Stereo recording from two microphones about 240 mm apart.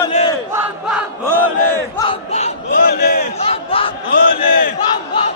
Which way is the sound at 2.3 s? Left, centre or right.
Left.